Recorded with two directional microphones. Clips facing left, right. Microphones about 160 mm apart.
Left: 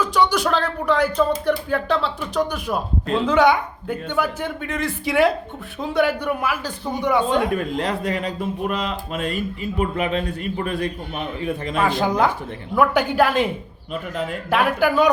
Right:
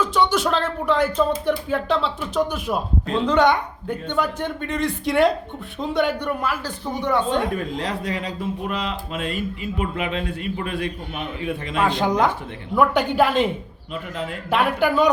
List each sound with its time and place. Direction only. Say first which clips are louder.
0.0 s speech: left 1 dB; centre (ahead or behind)
7.5 s speech: left 3 dB; 55° left (ahead or behind)
11.8 s speech: even; 5° left (ahead or behind)
14.5 s speech: left 1 dB; centre (ahead or behind)